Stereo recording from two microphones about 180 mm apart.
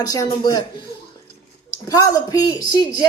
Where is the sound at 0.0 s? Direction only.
20° left (ahead or behind).